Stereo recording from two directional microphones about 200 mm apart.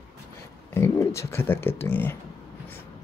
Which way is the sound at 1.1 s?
10° left (ahead or behind).